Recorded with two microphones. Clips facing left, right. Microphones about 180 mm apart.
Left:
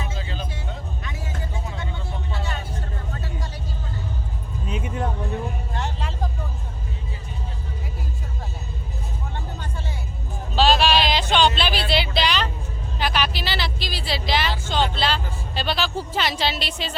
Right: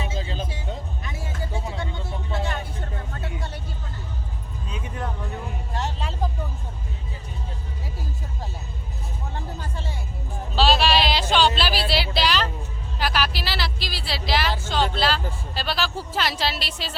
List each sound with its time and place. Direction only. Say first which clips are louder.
0.0 s music: right 2 dB; 25° right (ahead or behind)
4.7 s vehicle: left 5 dB; 25° left (ahead or behind)
10.5 s music: left 1 dB; centre (ahead or behind)
13.0 s vehicle: left 1 dB; centre (ahead or behind)